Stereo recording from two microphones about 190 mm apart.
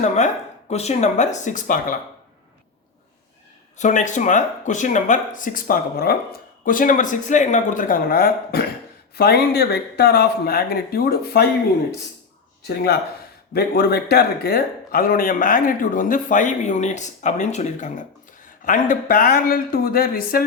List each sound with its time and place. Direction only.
0.7 s speech: 35° left (ahead or behind)
3.8 s speech: 40° left (ahead or behind)
12.6 s speech: 55° left (ahead or behind)